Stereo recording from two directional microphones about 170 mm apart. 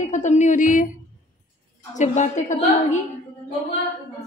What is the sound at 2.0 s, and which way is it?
A woman's voice, 45° left (ahead or behind).